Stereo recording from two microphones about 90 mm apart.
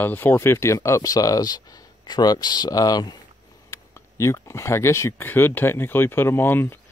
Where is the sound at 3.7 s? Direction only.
35° left (ahead or behind).